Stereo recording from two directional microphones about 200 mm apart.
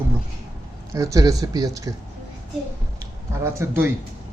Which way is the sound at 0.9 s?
15° right (ahead or behind).